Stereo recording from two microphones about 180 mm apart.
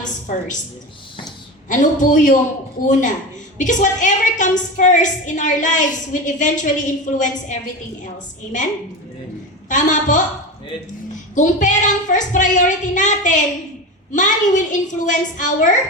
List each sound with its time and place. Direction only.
0.0 s a sound: 45° left (ahead or behind)
1.7 s a woman's voice: 45° left (ahead or behind)
9.6 s a woman's voice: 45° left (ahead or behind)
11.3 s a woman's voice: 45° left (ahead or behind)